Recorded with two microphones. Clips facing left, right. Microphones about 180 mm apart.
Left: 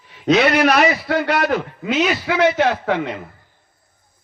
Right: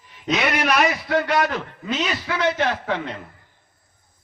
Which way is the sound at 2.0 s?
90° left.